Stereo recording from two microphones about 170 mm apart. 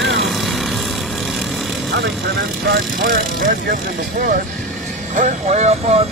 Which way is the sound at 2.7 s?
60° right (ahead or behind).